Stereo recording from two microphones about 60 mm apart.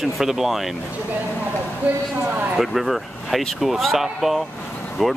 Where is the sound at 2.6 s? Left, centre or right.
Centre.